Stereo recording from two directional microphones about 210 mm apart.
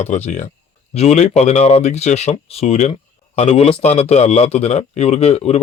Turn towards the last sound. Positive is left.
turn(degrees=30)  # may be behind; listen again after turning